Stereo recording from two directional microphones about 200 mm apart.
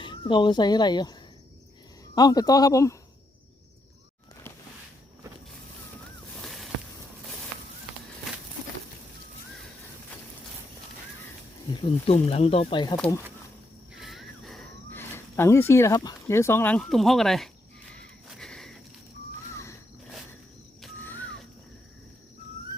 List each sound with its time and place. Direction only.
0.0 s speech: 25° left (ahead or behind)
2.1 s speech: 20° left (ahead or behind)
6.4 s a sound: centre (ahead or behind)
11.7 s speech: 25° left (ahead or behind)
13.9 s a sound: centre (ahead or behind)
14.9 s speech: 10° left (ahead or behind)
17.9 s gasp: centre (ahead or behind)
20.8 s music: 10° left (ahead or behind)